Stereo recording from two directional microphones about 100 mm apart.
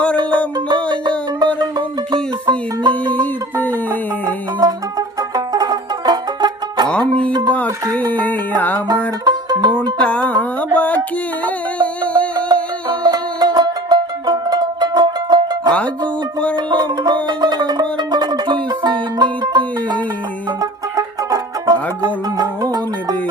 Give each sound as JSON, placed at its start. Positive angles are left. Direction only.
{"t": 0.7, "sound": "music", "side_deg": -50}
{"t": 3.1, "sound": "music", "side_deg": 20}
{"t": 4.6, "sound": "music", "side_deg": -40}
{"t": 8.1, "sound": "music", "side_deg": 15}
{"t": 9.2, "sound": "music", "side_deg": -45}
{"t": 10.0, "sound": "music", "side_deg": 10}
{"t": 13.0, "sound": "music", "side_deg": -45}